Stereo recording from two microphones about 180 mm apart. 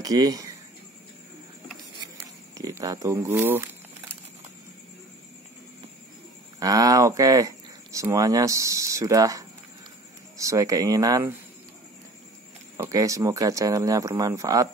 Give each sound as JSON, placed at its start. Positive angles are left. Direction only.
{"t": 0.0, "sound": "speech", "side_deg": -20}
{"t": 2.5, "sound": "speech", "side_deg": -20}
{"t": 6.6, "sound": "speech", "side_deg": -20}
{"t": 12.7, "sound": "speech", "side_deg": -15}